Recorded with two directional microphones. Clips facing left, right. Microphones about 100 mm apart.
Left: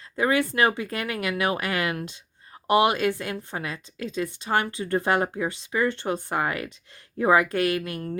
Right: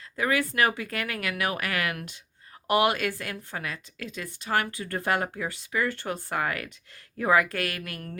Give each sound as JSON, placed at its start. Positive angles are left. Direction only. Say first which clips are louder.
{"t": 0.2, "sound": "a woman's voice", "louder": "left 3 dB", "side_deg": 25}